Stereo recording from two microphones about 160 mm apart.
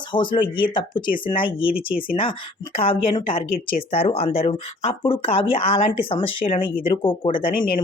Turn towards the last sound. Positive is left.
turn(degrees=35)  # may be behind; listen again after turning